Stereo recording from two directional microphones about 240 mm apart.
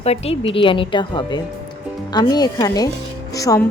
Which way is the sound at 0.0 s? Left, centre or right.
Left.